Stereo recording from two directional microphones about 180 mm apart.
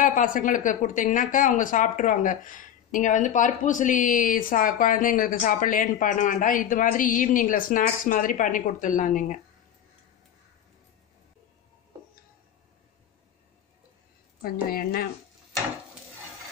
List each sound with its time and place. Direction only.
0.0 s a woman's voice: 50° left (ahead or behind)
14.4 s a woman's voice: 55° left (ahead or behind)